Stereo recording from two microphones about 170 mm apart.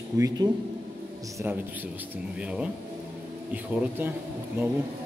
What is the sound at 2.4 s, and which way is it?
Speech, 5° right (ahead or behind).